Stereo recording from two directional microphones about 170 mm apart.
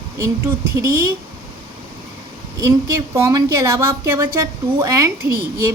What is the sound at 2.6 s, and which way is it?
A woman's voice, 15° right (ahead or behind).